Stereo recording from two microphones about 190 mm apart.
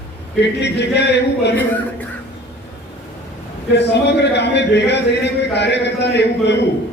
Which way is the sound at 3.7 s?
65° left (ahead or behind).